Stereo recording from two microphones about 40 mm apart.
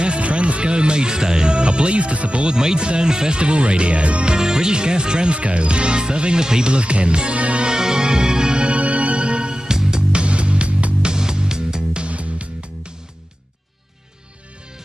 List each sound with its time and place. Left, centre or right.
0.0 s speech: right
2.5 s speech: centre
7.6 s music: centre
10.1 s music: right
12.1 s music: right